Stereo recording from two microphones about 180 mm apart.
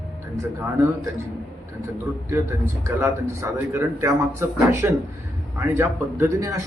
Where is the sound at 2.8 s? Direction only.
15° right (ahead or behind).